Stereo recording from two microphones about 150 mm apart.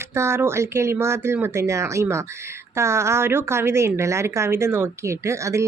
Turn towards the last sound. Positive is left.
turn(degrees=-20)  # may be behind; listen again after turning